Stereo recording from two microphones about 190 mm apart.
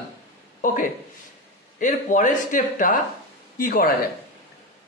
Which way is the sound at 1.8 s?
40° left (ahead or behind).